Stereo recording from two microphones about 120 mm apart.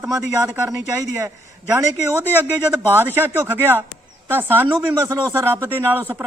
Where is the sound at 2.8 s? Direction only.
15° right (ahead or behind).